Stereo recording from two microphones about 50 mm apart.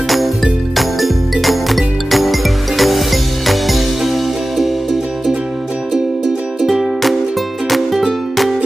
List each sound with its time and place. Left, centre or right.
0.7 s music: centre
6.6 s music: centre